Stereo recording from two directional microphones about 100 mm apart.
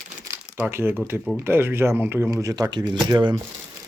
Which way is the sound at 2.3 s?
35° right (ahead or behind).